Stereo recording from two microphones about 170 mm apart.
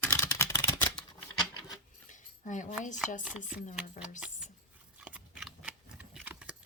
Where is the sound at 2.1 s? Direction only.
50° left (ahead or behind).